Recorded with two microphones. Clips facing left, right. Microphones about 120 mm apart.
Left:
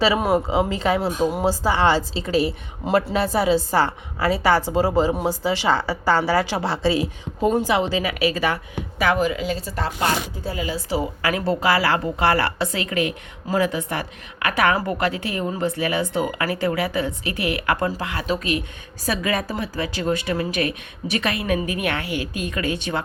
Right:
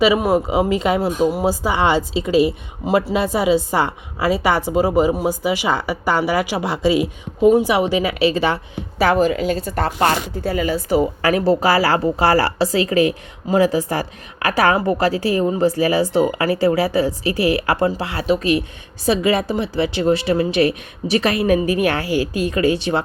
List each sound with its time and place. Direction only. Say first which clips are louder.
0.0 s a woman's voice: right 4 dB; 10° right (ahead or behind); by 23.0 s 30° right (ahead or behind)